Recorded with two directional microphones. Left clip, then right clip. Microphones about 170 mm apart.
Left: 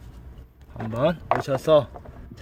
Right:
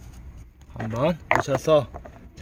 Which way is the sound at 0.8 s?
10° right (ahead or behind).